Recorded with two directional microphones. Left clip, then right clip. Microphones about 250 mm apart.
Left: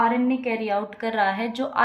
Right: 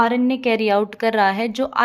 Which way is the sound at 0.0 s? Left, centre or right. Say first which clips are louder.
Right 4 dB; right.